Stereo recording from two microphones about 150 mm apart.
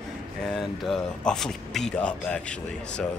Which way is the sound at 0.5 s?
Centre (ahead or behind).